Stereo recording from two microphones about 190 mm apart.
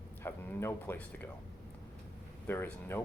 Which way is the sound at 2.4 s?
10° left (ahead or behind).